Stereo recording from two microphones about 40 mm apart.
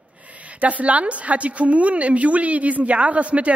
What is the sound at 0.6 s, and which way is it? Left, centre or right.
A woman's voice, right.